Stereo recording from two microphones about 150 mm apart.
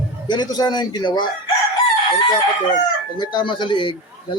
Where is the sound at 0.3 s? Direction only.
25° left (ahead or behind).